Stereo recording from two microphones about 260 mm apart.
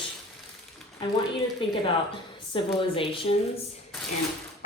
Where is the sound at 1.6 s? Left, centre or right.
Centre.